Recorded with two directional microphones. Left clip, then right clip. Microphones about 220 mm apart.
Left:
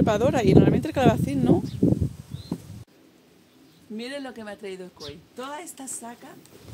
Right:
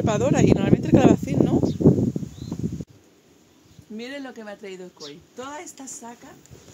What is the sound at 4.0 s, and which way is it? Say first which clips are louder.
Speech: even; 5° left (ahead or behind).